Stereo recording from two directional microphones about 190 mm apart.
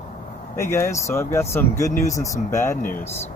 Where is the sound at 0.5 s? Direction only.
15° left (ahead or behind).